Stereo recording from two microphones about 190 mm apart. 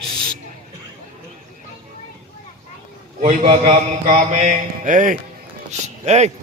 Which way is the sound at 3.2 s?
45° right (ahead or behind).